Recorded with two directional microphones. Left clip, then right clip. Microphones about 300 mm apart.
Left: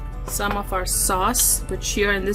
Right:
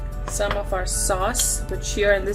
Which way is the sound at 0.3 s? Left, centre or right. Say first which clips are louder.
Even; left.